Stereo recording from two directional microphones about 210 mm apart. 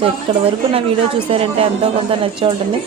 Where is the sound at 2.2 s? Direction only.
25° right (ahead or behind).